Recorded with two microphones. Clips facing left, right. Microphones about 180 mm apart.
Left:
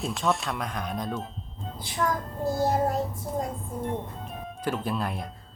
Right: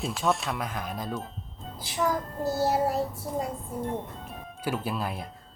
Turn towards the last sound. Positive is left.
turn(degrees=-5)  # may be behind; listen again after turning